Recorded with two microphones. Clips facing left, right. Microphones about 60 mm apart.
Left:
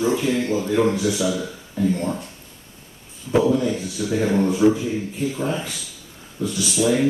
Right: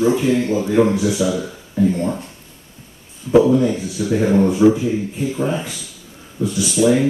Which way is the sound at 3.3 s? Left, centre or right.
Centre.